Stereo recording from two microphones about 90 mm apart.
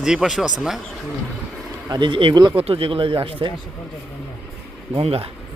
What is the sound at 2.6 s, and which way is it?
Speech, 90° right.